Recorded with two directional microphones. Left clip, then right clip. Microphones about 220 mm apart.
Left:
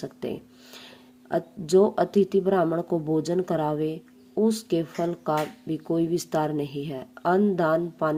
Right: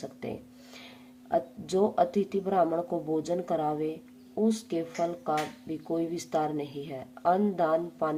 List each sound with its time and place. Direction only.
0.0 s speech: 25° left (ahead or behind)